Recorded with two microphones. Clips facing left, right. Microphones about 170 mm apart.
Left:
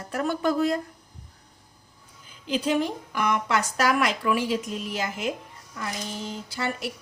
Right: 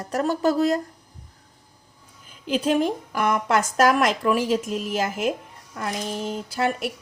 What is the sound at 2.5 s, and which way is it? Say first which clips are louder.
Speech: right 3 dB; 50° right (ahead or behind).